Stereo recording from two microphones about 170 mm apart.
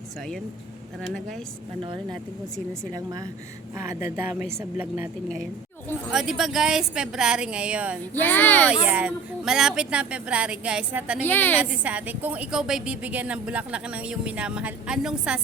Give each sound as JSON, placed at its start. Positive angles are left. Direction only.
{"t": 2.9, "sound": "a woman's voice", "side_deg": -20}
{"t": 6.1, "sound": "speech", "side_deg": -5}
{"t": 8.2, "sound": "speech", "side_deg": 10}
{"t": 8.6, "sound": "a woman's voice", "side_deg": -5}
{"t": 11.3, "sound": "speech", "side_deg": 10}
{"t": 11.6, "sound": "a woman's voice", "side_deg": -10}